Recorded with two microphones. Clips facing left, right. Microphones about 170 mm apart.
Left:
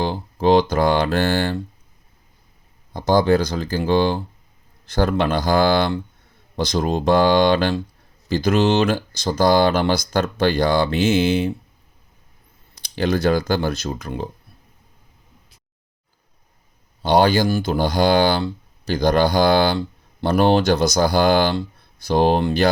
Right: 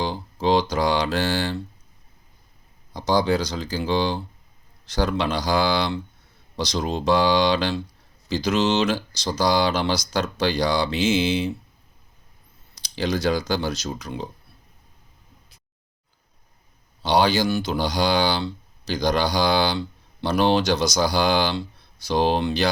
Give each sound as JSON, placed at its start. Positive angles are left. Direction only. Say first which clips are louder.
{"t": 0.0, "sound": "speech", "louder": "left 4 dB", "side_deg": 50}
{"t": 2.9, "sound": "speech", "louder": "left 5 dB", "side_deg": 50}
{"t": 12.8, "sound": "speech", "louder": "left 4 dB", "side_deg": 55}
{"t": 17.0, "sound": "speech", "louder": "left 4 dB", "side_deg": 50}